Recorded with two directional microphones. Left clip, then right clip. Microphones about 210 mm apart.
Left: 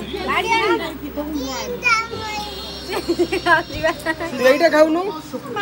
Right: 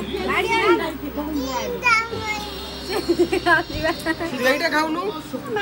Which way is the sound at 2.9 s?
30° left (ahead or behind).